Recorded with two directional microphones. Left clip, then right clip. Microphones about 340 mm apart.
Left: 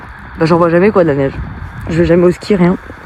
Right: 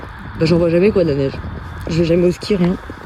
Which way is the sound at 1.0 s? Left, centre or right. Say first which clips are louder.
Left 5 dB; centre.